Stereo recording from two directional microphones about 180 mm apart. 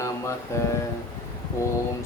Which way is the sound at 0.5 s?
15° left (ahead or behind).